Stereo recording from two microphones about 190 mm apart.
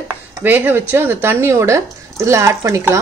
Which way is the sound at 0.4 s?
10° right (ahead or behind).